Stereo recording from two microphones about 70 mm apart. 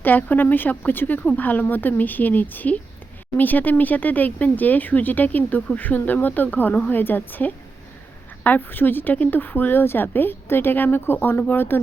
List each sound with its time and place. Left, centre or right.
0.0 s a woman's voice: left